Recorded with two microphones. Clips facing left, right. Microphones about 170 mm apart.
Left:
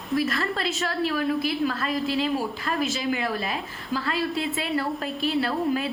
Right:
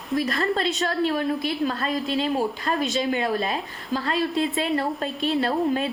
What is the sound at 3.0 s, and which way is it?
A woman's voice, 30° right (ahead or behind).